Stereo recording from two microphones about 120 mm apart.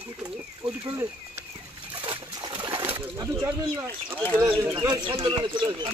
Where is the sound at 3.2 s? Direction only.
25° right (ahead or behind).